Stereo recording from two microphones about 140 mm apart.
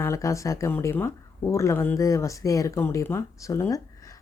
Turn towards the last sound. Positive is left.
turn(degrees=25)  # may be behind; listen again after turning